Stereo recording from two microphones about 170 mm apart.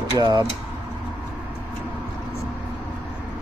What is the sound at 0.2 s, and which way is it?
Speech, 25° right (ahead or behind).